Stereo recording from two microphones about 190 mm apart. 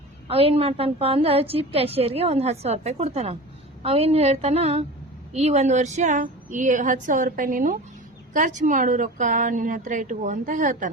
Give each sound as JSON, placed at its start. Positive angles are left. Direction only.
{"t": 0.3, "sound": "a woman's voice", "side_deg": -30}